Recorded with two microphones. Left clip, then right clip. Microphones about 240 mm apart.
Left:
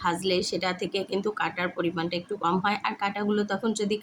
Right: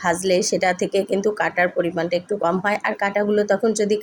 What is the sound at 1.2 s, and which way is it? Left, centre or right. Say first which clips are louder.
Speech: right 8 dB; centre.